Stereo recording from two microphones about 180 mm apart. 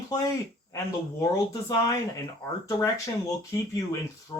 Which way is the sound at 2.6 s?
20° left (ahead or behind).